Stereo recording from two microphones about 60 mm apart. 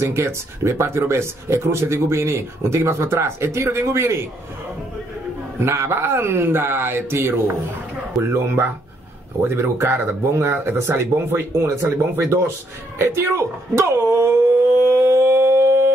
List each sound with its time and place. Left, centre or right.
0.0 s speech: right
5.6 s speech: right
8.2 s speech: right
14.8 s a sound: right